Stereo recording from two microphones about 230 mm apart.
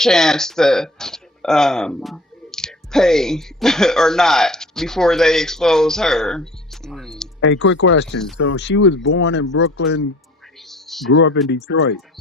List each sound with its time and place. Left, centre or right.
0.0 s speech: centre
7.3 s speech: left
10.7 s a sound: centre
11.1 s speech: left